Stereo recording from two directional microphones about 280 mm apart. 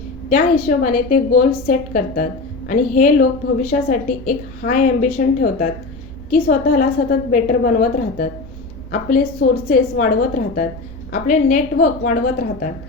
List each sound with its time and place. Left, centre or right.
0.3 s a woman's voice: left